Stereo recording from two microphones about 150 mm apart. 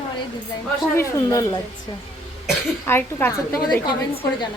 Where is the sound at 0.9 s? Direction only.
20° left (ahead or behind).